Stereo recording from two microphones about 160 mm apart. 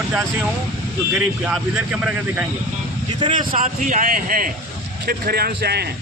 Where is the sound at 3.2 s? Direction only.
30° right (ahead or behind).